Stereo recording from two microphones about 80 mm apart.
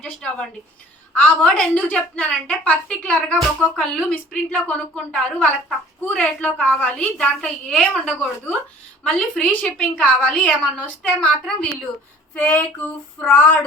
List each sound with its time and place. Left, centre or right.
0.0 s a woman's voice: centre